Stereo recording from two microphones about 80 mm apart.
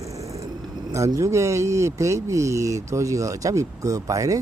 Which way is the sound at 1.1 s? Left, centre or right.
Right.